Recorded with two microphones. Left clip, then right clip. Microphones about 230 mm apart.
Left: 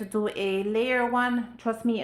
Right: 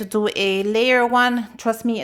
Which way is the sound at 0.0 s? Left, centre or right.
Right.